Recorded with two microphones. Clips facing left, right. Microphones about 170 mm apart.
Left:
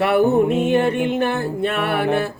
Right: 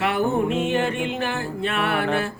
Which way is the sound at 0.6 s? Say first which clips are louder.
Left 5 dB; 55° left (ahead or behind).